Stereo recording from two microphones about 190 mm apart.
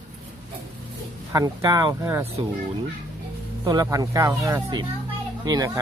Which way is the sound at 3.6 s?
20° right (ahead or behind).